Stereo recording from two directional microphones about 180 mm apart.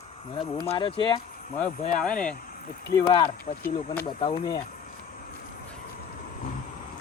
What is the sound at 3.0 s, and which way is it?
Speech, 25° left (ahead or behind).